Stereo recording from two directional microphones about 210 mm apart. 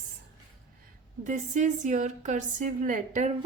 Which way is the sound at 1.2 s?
35° right (ahead or behind).